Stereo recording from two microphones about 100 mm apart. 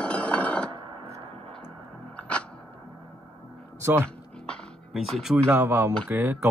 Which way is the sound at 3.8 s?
25° right (ahead or behind).